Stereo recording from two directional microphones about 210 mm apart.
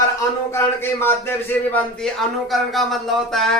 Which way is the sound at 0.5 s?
10° left (ahead or behind).